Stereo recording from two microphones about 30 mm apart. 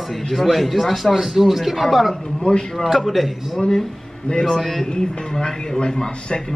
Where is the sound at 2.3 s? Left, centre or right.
Left.